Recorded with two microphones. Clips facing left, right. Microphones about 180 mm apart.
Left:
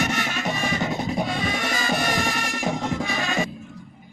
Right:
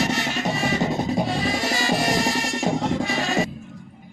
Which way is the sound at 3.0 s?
35° right (ahead or behind).